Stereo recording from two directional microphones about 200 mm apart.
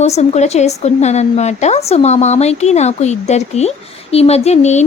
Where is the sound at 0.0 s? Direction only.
35° left (ahead or behind).